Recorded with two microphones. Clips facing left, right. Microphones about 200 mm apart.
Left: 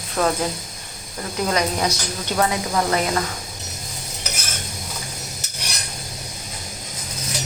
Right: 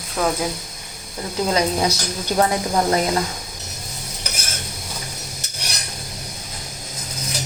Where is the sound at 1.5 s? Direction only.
25° right (ahead or behind).